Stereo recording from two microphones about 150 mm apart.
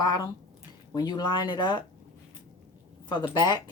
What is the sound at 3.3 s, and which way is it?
Speech, 30° left (ahead or behind).